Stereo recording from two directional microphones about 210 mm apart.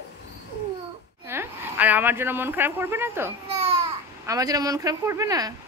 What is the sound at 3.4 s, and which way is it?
Babbling, 30° right (ahead or behind).